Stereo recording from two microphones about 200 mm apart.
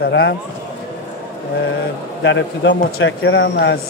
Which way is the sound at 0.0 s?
60° left (ahead or behind).